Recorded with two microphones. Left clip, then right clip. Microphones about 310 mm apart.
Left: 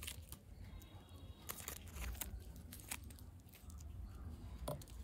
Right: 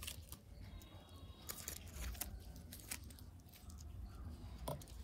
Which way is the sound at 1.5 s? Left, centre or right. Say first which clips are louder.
Left 1 dB; centre.